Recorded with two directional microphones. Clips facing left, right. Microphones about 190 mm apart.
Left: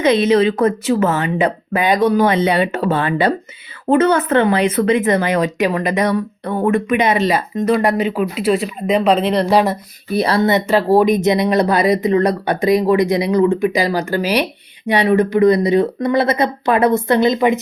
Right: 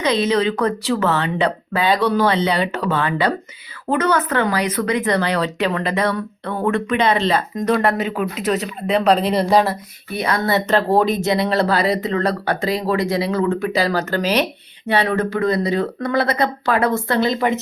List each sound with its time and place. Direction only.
0.0 s speech: 25° left (ahead or behind); by 9.6 s centre (ahead or behind)
10.1 s speech: 35° left (ahead or behind)
10.7 s speech: 10° left (ahead or behind)